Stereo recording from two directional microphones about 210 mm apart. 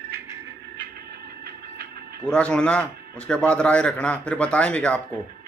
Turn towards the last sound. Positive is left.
turn(degrees=5)  # may be behind; listen again after turning